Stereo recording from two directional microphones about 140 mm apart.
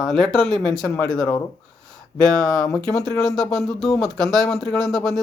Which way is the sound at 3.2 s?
Centre (ahead or behind).